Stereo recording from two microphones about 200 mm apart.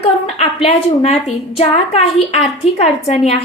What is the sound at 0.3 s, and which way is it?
A woman's voice, 30° left (ahead or behind).